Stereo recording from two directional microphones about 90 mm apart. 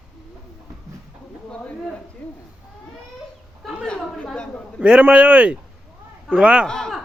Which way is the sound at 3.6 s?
Centre (ahead or behind).